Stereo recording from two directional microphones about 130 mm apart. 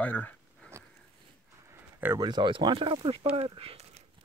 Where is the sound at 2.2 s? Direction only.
35° right (ahead or behind).